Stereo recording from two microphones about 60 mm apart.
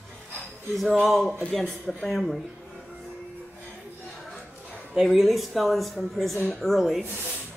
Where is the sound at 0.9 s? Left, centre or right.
Centre.